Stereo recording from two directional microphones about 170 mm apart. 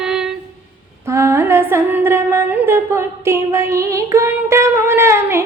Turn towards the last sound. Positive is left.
turn(degrees=-15)  # may be behind; listen again after turning